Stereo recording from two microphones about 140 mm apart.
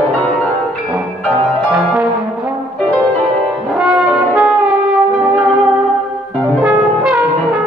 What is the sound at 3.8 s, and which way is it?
Brass instrument, 5° right (ahead or behind).